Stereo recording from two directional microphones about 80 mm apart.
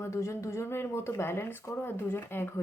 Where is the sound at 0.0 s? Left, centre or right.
Left.